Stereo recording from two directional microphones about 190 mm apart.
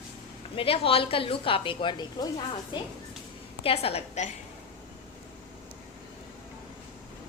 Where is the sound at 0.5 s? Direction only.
30° left (ahead or behind).